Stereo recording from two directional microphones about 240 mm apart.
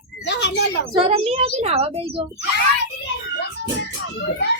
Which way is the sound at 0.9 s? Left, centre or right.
Right.